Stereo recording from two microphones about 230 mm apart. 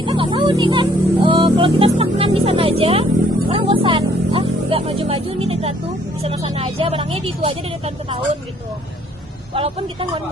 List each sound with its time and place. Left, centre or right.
0.0 s speech: centre
9.6 s speech: right